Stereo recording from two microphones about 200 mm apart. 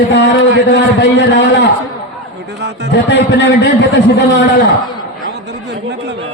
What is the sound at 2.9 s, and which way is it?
Speech, 60° left (ahead or behind).